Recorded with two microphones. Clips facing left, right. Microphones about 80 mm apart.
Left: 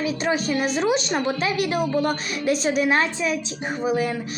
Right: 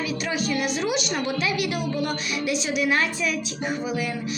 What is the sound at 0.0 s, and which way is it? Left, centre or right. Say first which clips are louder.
A woman's voice: left 4 dB; left.